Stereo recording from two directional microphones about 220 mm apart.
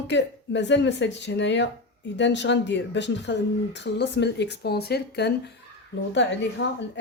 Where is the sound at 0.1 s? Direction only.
55° left (ahead or behind).